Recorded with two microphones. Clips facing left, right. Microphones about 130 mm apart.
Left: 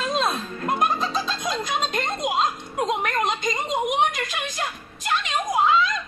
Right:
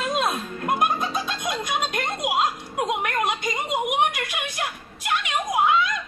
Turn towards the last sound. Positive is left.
turn(degrees=-10)  # may be behind; listen again after turning